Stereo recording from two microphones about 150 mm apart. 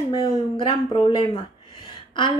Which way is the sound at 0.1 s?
35° left (ahead or behind).